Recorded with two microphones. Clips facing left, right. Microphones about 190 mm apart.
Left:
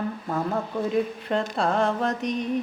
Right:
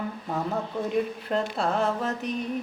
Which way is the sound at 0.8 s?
Centre (ahead or behind).